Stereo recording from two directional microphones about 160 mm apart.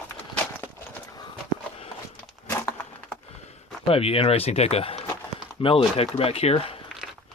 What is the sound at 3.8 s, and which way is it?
Speech, 35° left (ahead or behind).